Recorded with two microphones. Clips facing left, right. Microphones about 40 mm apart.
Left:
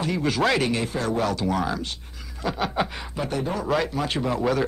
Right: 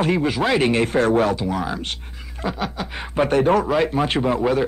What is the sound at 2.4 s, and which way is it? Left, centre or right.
Speech, right.